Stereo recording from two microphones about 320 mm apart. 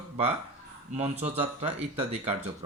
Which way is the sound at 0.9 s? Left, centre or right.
Centre.